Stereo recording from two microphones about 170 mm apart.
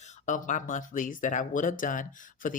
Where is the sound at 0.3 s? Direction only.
50° left (ahead or behind).